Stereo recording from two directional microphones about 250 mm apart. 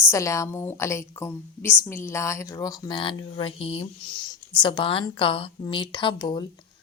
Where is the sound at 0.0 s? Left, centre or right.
Centre.